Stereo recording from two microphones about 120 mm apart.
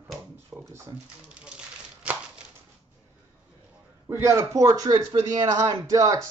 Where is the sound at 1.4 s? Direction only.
10° right (ahead or behind).